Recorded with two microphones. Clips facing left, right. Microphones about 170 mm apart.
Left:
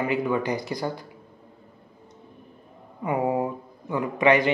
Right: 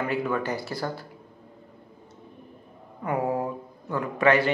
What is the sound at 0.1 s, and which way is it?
Speech, 15° left (ahead or behind).